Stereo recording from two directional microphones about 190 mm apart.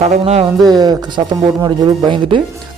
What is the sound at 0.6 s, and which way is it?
Speech, 20° right (ahead or behind).